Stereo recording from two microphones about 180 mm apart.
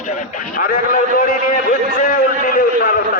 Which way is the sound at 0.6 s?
50° left (ahead or behind).